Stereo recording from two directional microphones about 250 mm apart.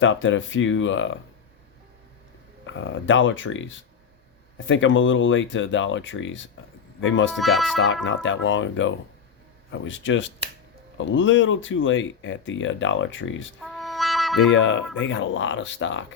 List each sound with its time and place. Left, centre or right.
0.0 s speech: left
2.6 s speech: left
7.3 s speech: centre
8.0 s speech: left
13.7 s music: centre
14.5 s speech: left